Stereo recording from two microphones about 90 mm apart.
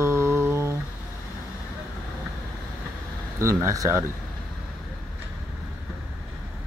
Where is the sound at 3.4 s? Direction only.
35° right (ahead or behind).